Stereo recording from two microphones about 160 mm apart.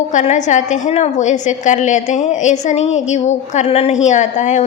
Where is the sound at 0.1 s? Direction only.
50° left (ahead or behind).